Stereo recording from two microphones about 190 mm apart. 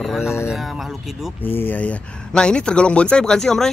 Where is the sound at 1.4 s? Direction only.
10° left (ahead or behind).